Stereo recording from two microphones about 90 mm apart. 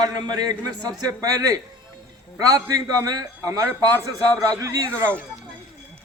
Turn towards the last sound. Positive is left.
turn(degrees=-40)  # may be behind; listen again after turning